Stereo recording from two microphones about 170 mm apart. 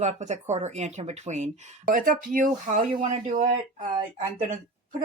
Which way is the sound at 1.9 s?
55° right (ahead or behind).